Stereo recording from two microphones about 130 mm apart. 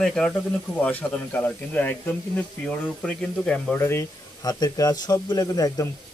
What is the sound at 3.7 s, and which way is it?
Speech, 20° left (ahead or behind).